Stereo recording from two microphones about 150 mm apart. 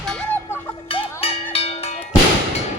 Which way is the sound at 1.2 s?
40° left (ahead or behind).